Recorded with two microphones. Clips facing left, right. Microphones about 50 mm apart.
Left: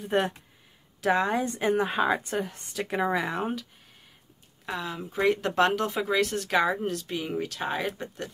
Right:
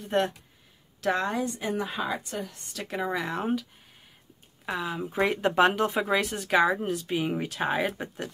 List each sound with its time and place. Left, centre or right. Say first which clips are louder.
0.0 s speech: even; centre
1.4 s a woman's voice: left 4 dB; left
2.7 s speech: left 3 dB; centre
3.3 s speech: right 1 dB; centre
4.6 s speech: right 2 dB; centre